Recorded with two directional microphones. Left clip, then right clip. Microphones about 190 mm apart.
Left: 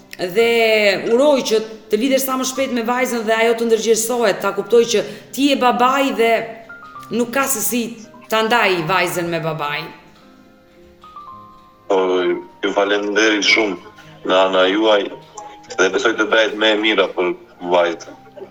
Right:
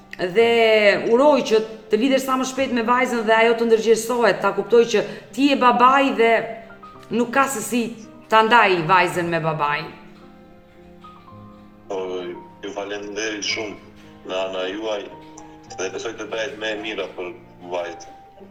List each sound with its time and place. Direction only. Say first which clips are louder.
0.1 s a man's voice: left 1 dB; 5° right (ahead or behind)
11.9 s a man's voice: left 11 dB; 25° left (ahead or behind)